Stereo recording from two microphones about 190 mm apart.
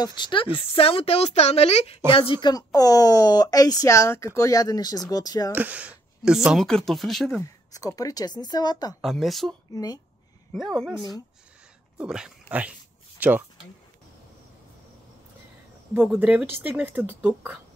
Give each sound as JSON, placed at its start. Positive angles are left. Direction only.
{"t": 0.0, "sound": "a woman's voice", "side_deg": 25}
{"t": 5.5, "sound": "speech", "side_deg": -10}
{"t": 7.4, "sound": "speech", "side_deg": 20}
{"t": 9.0, "sound": "speech", "side_deg": 0}
{"t": 15.9, "sound": "speech", "side_deg": -10}